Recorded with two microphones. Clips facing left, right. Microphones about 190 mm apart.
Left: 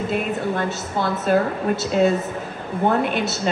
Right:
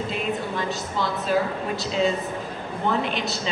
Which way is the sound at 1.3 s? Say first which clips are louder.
Left 6 dB; 55° left (ahead or behind).